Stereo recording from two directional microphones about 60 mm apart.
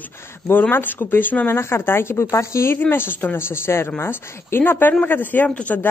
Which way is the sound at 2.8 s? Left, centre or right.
Left.